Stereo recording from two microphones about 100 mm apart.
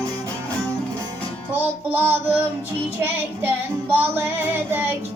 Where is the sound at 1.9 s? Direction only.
20° right (ahead or behind).